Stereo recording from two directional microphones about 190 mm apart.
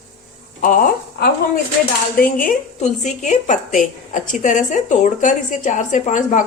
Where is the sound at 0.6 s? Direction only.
45° left (ahead or behind).